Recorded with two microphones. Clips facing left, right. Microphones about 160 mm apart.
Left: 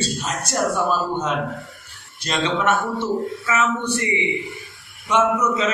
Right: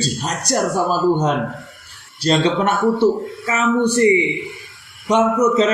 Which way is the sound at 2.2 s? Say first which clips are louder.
Right 5 dB; 35° right (ahead or behind).